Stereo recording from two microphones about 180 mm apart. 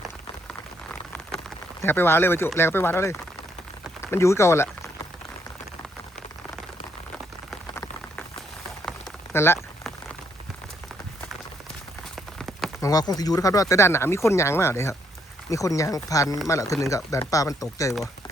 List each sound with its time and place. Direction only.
1.8 s speech: 15° left (ahead or behind)
9.3 s speech: 15° left (ahead or behind)
12.1 s rain on surface: centre (ahead or behind)
12.8 s speech: 20° left (ahead or behind)